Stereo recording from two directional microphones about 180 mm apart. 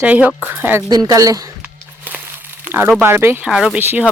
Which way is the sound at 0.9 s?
20° right (ahead or behind).